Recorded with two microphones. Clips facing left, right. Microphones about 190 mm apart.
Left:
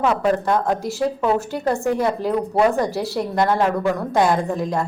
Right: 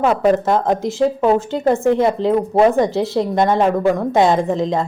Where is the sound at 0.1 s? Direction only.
20° right (ahead or behind).